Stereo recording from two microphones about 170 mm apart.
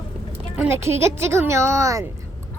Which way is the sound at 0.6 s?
15° right (ahead or behind).